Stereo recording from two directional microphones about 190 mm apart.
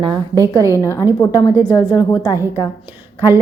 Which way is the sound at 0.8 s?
15° left (ahead or behind).